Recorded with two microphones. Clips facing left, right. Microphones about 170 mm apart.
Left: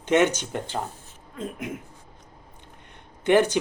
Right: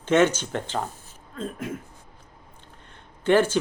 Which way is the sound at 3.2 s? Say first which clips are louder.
Even; 15° left (ahead or behind).